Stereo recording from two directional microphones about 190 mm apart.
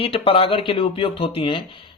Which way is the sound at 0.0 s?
30° left (ahead or behind).